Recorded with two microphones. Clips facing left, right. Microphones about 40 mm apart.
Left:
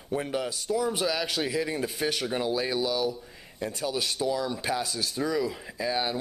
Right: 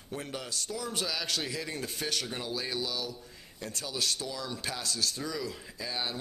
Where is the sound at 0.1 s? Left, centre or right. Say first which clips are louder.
Left 8 dB; centre.